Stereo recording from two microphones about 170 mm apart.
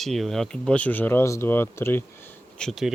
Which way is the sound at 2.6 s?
Centre (ahead or behind).